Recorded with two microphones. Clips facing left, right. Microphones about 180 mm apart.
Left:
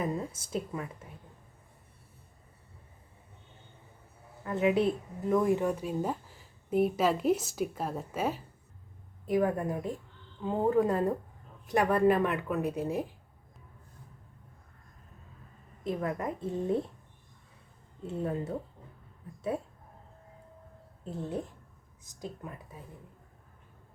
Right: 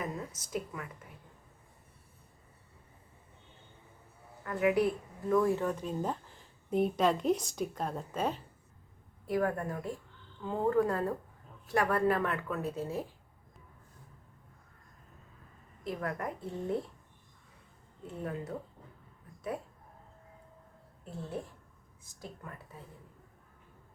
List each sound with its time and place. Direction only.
0.0 s speech: 30° left (ahead or behind)
4.4 s speech: 25° left (ahead or behind); by 8.4 s 5° left (ahead or behind)
9.2 s a woman's voice: 20° left (ahead or behind)
15.8 s a woman's voice: 20° left (ahead or behind)
18.0 s a woman's voice: 25° left (ahead or behind)
21.0 s speech: 20° left (ahead or behind)